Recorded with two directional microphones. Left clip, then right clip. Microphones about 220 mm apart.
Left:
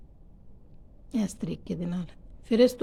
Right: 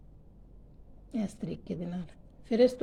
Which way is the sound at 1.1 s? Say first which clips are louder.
Left 4 dB; 20° left (ahead or behind).